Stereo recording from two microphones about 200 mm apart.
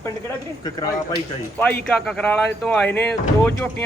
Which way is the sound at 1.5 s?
10° left (ahead or behind).